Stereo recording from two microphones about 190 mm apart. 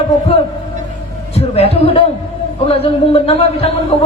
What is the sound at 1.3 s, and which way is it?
A man's voice, 30° left (ahead or behind).